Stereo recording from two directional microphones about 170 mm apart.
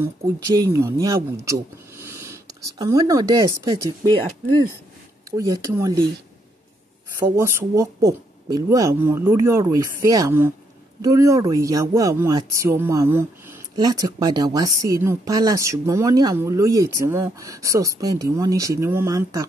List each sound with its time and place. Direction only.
0.0 s speech: 20° right (ahead or behind)
5.3 s speech: 20° right (ahead or behind)
7.2 s speech: 15° right (ahead or behind)